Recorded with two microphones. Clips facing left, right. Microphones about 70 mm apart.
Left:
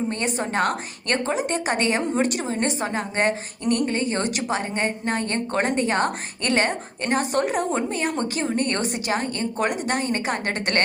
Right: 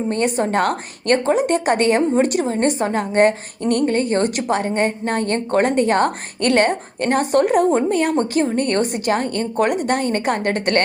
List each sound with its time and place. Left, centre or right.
0.1 s a woman's voice: right
1.5 s a woman's voice: right